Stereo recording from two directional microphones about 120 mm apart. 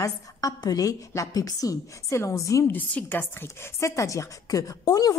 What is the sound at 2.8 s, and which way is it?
Speech, 15° left (ahead or behind).